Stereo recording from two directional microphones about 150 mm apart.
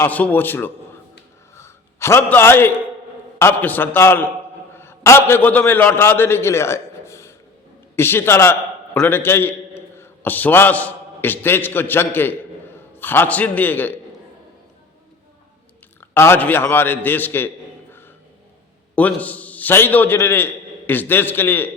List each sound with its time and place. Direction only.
0.0 s a man's voice: 10° left (ahead or behind)
1.5 s a sound: 20° left (ahead or behind)
3.3 s a man's voice: 10° left (ahead or behind)
16.0 s a man's voice: 15° left (ahead or behind)
18.9 s a man's voice: 10° left (ahead or behind)